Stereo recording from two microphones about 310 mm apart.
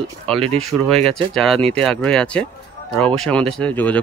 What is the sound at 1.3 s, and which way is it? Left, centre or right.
Speech, centre.